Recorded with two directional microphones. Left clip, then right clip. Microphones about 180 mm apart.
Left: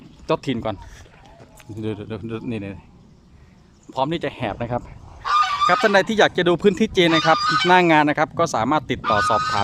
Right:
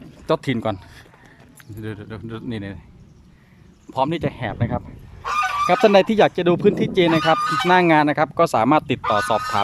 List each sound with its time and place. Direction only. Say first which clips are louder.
0.3 s speech: right 1 dB; centre (ahead or behind)
1.7 s speech: left 5 dB; 15° left (ahead or behind)
3.9 s speech: right 1 dB; centre (ahead or behind)
5.2 s goose: left 2 dB; 20° right (ahead or behind)
5.6 s speech: right 5 dB; 10° right (ahead or behind)
7.3 s speech: left 1 dB; 45° right (ahead or behind)
7.7 s speech: even; centre (ahead or behind)